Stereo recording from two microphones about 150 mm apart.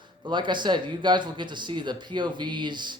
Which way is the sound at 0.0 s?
30° right (ahead or behind).